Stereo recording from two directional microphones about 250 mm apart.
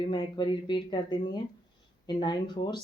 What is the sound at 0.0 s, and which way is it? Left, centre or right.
Speech, centre.